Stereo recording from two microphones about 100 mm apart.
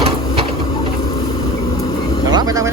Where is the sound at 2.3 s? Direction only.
40° right (ahead or behind).